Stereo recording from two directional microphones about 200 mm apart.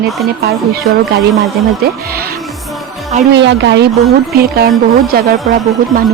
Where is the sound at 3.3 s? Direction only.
60° right (ahead or behind).